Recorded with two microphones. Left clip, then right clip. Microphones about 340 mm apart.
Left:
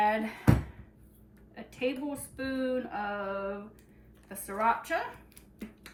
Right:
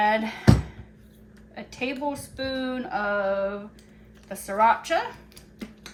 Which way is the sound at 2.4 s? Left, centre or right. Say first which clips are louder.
Right 2 dB; centre.